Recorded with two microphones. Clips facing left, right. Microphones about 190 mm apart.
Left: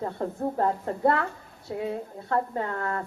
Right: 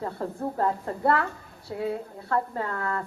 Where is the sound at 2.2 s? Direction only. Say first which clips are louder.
Left 1 dB; 20° left (ahead or behind).